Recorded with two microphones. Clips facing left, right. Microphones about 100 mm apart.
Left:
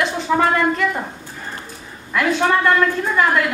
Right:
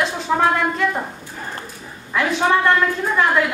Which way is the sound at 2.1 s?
5° right (ahead or behind).